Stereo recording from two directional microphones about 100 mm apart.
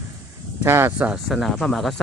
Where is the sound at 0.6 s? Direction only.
25° right (ahead or behind).